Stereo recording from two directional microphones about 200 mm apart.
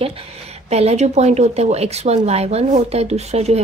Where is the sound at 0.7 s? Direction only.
30° right (ahead or behind).